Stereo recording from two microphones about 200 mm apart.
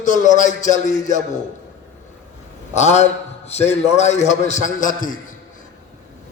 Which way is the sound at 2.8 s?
35° left (ahead or behind).